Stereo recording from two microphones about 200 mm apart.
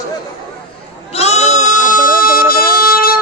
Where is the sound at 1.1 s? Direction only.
30° left (ahead or behind).